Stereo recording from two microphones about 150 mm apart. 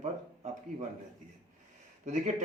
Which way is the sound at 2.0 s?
55° right (ahead or behind).